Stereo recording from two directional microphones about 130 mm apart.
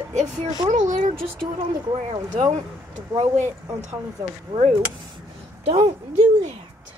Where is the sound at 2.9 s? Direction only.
60° right (ahead or behind).